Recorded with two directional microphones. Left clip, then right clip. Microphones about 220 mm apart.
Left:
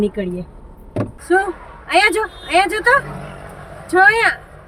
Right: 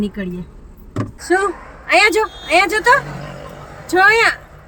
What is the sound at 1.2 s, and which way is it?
Speech, 15° right (ahead or behind).